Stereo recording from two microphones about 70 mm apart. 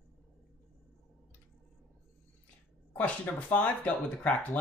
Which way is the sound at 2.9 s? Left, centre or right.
Left.